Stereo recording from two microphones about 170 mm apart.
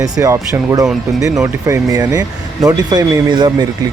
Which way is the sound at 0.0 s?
20° right (ahead or behind).